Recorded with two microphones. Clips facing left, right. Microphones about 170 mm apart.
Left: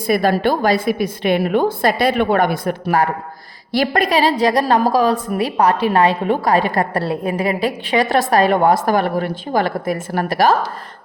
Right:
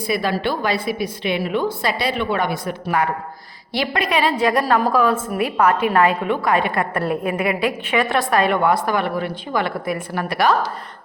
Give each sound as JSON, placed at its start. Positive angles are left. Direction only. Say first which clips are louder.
{"t": 0.1, "sound": "a woman's voice", "louder": "left 6 dB", "side_deg": 45}